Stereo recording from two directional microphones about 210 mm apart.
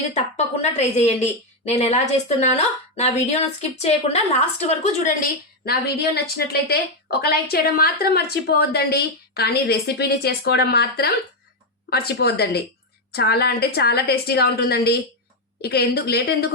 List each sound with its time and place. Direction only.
0.1 s a woman's voice: 30° left (ahead or behind); by 16.5 s 50° left (ahead or behind)